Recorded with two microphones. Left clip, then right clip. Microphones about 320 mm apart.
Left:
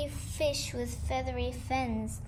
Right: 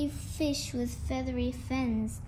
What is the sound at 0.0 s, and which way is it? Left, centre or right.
Child singing, left.